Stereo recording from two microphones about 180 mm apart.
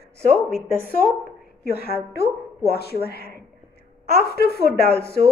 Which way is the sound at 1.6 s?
60° left (ahead or behind).